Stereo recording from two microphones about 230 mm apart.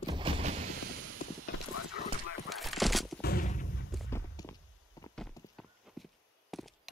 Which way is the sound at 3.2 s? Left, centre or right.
Left.